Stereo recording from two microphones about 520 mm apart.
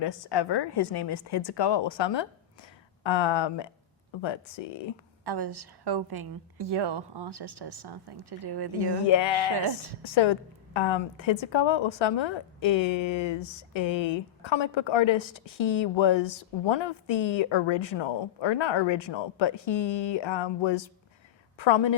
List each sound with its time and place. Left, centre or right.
0.0 s a woman's voice: left
5.2 s a woman's voice: right
9.0 s a woman's voice: left